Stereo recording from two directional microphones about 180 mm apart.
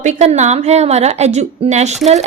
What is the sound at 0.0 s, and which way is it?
A woman's voice, 40° right (ahead or behind).